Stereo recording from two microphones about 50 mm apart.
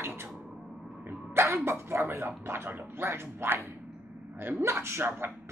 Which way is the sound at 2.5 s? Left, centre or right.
Right.